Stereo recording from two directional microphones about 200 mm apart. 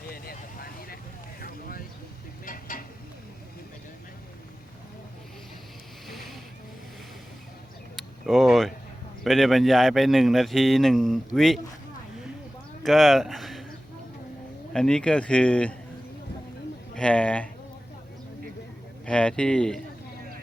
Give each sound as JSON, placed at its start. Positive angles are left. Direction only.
{"t": 0.1, "sound": "vehicle", "side_deg": 45}
{"t": 2.5, "sound": "a sound", "side_deg": 45}
{"t": 6.1, "sound": "boat", "side_deg": 0}
{"t": 7.9, "sound": "a sound", "side_deg": 0}
{"t": 9.2, "sound": "speech", "side_deg": 0}
{"t": 12.8, "sound": "speech", "side_deg": 0}
{"t": 14.7, "sound": "speech", "side_deg": 5}
{"t": 16.9, "sound": "speech", "side_deg": 5}
{"t": 19.0, "sound": "speech", "side_deg": 5}